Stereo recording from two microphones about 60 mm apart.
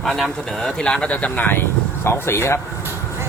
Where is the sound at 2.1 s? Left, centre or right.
Left.